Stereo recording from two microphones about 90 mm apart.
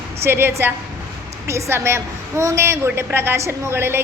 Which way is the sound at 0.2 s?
25° right (ahead or behind).